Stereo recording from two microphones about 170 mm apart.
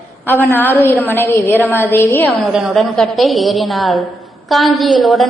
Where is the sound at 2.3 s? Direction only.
5° right (ahead or behind).